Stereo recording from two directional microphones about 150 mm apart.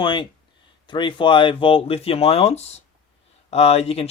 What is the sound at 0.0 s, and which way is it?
Speech, 30° left (ahead or behind).